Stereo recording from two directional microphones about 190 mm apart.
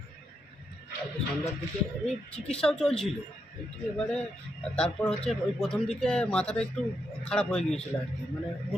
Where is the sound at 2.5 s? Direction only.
5° left (ahead or behind).